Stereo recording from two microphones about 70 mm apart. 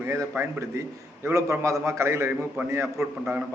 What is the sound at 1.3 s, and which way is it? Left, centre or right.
A man's voice, right.